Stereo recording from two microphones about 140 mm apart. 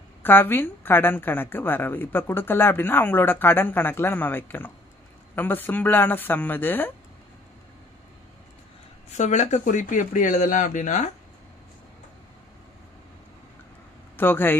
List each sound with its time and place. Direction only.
0.2 s a woman's voice: 15° left (ahead or behind)
9.1 s speech: 60° left (ahead or behind)
14.1 s speech: 15° left (ahead or behind)